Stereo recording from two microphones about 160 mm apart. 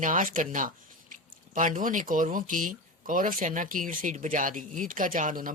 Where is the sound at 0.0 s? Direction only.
55° right (ahead or behind).